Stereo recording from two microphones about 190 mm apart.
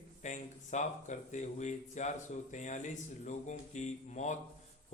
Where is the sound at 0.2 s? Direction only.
40° left (ahead or behind).